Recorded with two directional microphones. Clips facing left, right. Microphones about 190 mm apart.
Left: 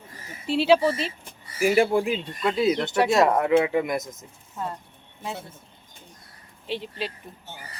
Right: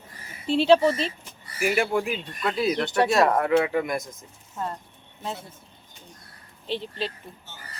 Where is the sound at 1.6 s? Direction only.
35° left (ahead or behind).